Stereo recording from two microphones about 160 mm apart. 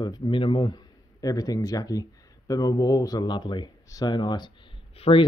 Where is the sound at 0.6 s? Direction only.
20° left (ahead or behind).